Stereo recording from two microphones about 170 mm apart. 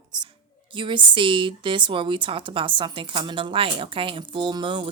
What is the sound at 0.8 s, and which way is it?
A woman's voice, 30° right (ahead or behind).